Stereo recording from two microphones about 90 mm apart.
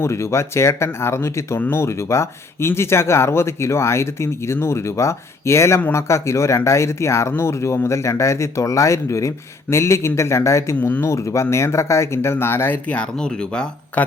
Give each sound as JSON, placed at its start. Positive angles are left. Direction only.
{"t": 0.0, "sound": "speech", "side_deg": 30}
{"t": 10.8, "sound": "speech", "side_deg": 20}
{"t": 11.0, "sound": "speech", "side_deg": 30}
{"t": 12.9, "sound": "speech", "side_deg": 10}